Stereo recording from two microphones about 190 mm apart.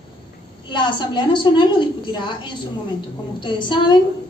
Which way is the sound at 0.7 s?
25° left (ahead or behind).